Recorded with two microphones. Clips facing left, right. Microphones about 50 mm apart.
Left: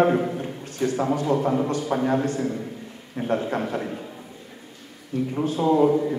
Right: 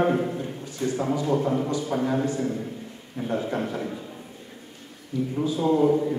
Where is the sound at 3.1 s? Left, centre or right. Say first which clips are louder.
Left 3 dB; left.